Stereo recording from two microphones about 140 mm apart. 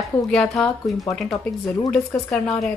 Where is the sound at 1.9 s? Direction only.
5° left (ahead or behind).